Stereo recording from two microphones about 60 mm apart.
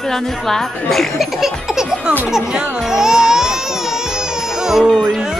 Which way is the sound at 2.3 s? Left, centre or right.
Centre.